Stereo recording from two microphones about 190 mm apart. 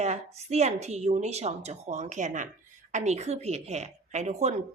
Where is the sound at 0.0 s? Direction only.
35° right (ahead or behind).